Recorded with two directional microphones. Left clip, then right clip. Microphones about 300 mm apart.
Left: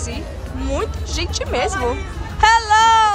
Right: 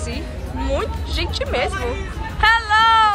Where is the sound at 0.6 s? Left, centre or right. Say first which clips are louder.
Even; centre.